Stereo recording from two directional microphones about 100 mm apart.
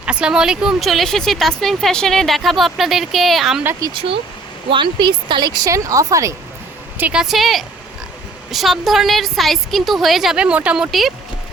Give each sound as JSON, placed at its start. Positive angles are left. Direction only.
{"t": 0.0, "sound": "speech", "side_deg": -10}
{"t": 4.7, "sound": "a woman's voice", "side_deg": -55}
{"t": 5.6, "sound": "a woman's voice", "side_deg": -35}
{"t": 7.0, "sound": "speech", "side_deg": -5}